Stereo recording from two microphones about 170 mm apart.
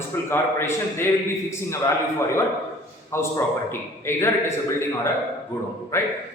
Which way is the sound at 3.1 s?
15° left (ahead or behind).